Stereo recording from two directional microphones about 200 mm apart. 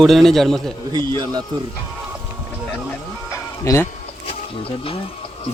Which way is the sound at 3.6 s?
15° left (ahead or behind).